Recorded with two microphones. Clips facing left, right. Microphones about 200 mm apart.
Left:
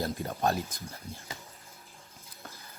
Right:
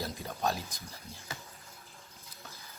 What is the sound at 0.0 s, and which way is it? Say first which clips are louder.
Speech: left 4 dB; 55° left (ahead or behind).